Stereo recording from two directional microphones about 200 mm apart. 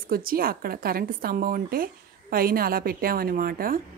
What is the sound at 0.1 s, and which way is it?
Speech, 45° right (ahead or behind).